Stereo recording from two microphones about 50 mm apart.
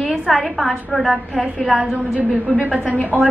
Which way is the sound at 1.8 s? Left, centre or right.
Right.